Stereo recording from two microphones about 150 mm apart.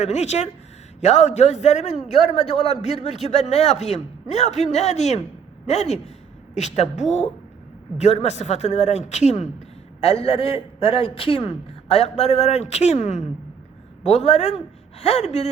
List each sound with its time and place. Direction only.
0.0 s a man's voice: 50° left (ahead or behind)